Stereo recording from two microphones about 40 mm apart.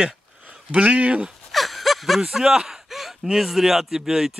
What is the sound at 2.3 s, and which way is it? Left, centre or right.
Speech, centre.